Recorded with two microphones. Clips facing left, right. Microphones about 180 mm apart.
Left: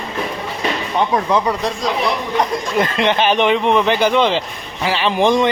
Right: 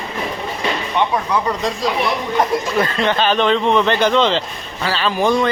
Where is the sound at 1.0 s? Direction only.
40° left (ahead or behind).